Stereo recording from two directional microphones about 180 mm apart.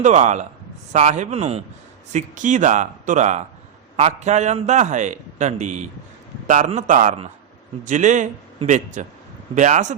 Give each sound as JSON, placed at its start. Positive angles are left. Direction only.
{"t": 0.0, "sound": "a man's voice", "side_deg": -40}